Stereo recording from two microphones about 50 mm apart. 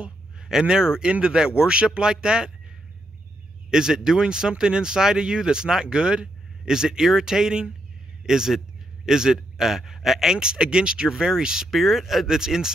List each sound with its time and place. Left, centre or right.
0.0 s speech: centre
3.7 s speech: centre